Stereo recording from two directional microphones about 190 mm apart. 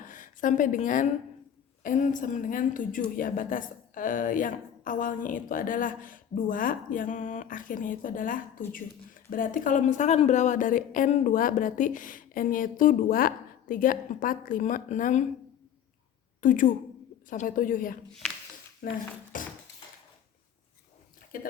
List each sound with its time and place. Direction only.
0.0 s a woman's voice: 45° left (ahead or behind)
16.4 s a woman's voice: 45° left (ahead or behind)
21.3 s a woman's voice: 45° left (ahead or behind)